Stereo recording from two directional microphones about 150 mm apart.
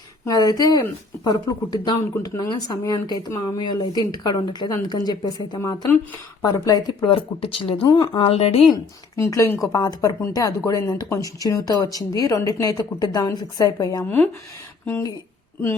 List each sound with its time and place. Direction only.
0.3 s a woman's voice: 25° left (ahead or behind); by 8.6 s 45° left (ahead or behind)
8.7 s speech: 20° left (ahead or behind)
14.0 s speech: 10° left (ahead or behind)